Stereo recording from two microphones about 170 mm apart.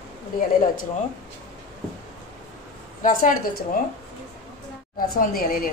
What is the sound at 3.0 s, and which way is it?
Speech, 50° left (ahead or behind).